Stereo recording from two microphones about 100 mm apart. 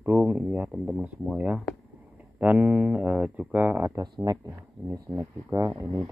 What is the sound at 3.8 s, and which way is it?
Speech, 35° right (ahead or behind).